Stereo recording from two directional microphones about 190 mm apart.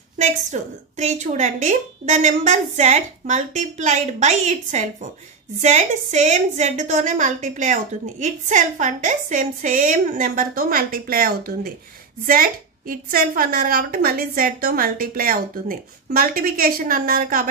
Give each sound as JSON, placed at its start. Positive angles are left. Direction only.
{"t": 0.2, "sound": "a woman's voice", "side_deg": -40}